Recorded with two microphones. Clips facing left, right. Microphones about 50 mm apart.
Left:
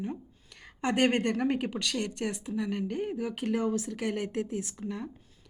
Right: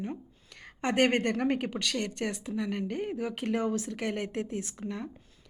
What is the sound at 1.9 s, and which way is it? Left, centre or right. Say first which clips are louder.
Speech: even; right.